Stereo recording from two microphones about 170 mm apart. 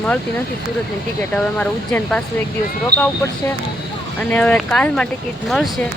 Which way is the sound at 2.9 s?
70° right (ahead or behind).